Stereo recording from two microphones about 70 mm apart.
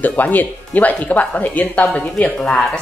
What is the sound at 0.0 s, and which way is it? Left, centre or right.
Speech, left.